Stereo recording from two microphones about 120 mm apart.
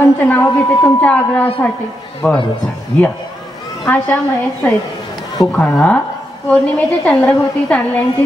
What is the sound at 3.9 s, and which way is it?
Speech, 15° left (ahead or behind).